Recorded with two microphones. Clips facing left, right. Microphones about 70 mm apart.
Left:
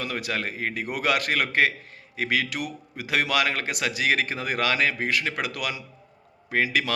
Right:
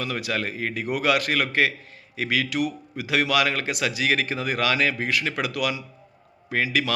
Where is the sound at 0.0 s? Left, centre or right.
Left.